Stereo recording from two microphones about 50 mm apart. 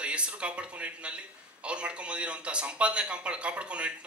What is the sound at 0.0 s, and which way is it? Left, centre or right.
A man's voice, right.